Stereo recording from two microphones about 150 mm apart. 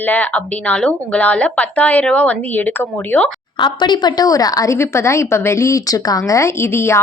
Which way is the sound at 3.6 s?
30° left (ahead or behind).